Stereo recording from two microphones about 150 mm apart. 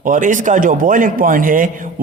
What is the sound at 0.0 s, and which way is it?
A man's voice, 60° right (ahead or behind).